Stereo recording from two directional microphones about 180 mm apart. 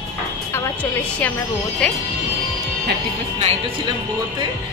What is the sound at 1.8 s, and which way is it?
Speech, 5° left (ahead or behind).